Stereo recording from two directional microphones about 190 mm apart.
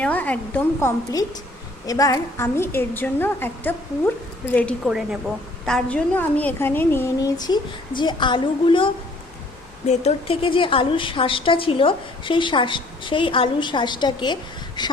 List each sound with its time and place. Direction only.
0.0 s a woman's voice: 10° left (ahead or behind)
4.9 s a woman's voice: 5° right (ahead or behind); by 14.9 s 20° left (ahead or behind)